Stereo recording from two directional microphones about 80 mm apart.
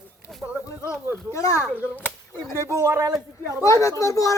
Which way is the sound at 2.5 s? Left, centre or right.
Right.